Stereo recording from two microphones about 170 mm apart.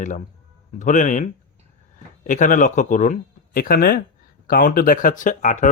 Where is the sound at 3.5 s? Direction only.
60° left (ahead or behind).